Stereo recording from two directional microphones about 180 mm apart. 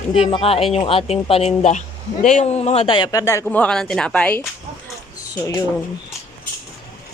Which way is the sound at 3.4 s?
5° left (ahead or behind).